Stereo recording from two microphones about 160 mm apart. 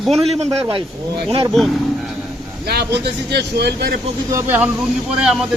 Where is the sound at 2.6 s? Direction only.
90° right.